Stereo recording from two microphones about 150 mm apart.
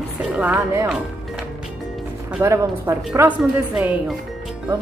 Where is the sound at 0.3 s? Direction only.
10° right (ahead or behind).